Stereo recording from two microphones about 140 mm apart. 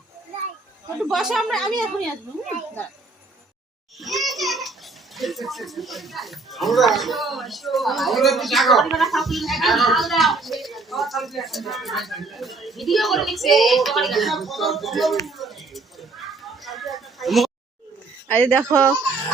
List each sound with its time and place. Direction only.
1.0 s speech: centre (ahead or behind)
4.0 s a sound: centre (ahead or behind)
5.1 s speech: centre (ahead or behind)
15.3 s a sound: centre (ahead or behind)
18.3 s speech: 5° left (ahead or behind)
18.7 s speech: 20° right (ahead or behind)